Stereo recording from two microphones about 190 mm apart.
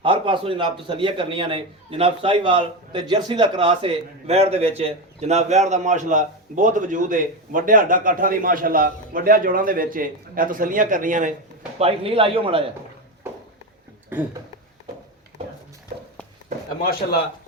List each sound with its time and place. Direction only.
0.0 s a man's voice: 25° right (ahead or behind); by 11.3 s 45° right (ahead or behind)
11.8 s a man's voice: 30° right (ahead or behind)
14.1 s speech: 10° right (ahead or behind)